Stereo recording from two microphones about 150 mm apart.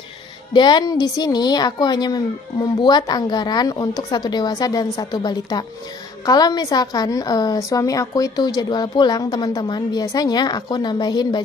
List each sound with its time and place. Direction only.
0.5 s a woman's voice: 30° left (ahead or behind)